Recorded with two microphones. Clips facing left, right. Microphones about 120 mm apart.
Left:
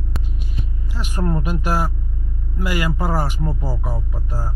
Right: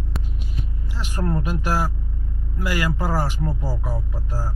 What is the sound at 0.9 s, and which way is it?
Speech, 15° left (ahead or behind).